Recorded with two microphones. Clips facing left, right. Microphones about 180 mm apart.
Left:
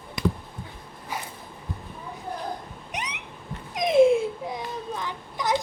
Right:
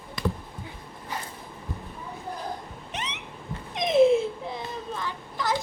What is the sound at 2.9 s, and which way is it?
Cat, 15° left (ahead or behind).